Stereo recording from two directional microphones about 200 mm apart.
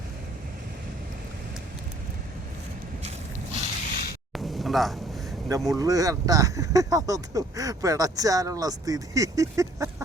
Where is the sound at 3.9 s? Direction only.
50° left (ahead or behind).